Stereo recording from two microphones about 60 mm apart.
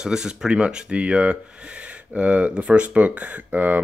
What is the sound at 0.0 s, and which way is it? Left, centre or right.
Speech, centre.